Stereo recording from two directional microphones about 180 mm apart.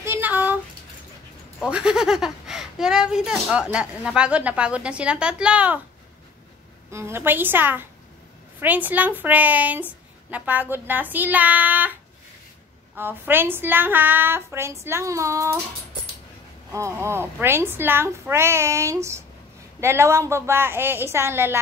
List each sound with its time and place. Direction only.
0.0 s a sound: 10° right (ahead or behind)
1.6 s speech: 5° right (ahead or behind)
6.9 s a woman's voice: 15° right (ahead or behind)
16.7 s a woman's voice: 15° right (ahead or behind)